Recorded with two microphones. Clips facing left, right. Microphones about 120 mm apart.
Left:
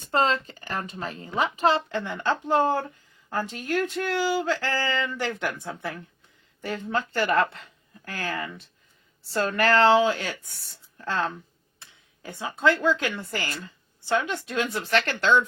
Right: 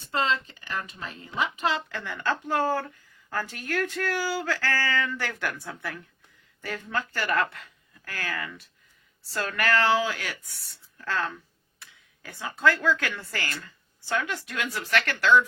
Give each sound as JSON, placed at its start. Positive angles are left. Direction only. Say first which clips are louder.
{"t": 0.0, "sound": "speech", "louder": "left 4 dB", "side_deg": 40}
{"t": 2.0, "sound": "a woman's voice", "louder": "left 1 dB", "side_deg": 25}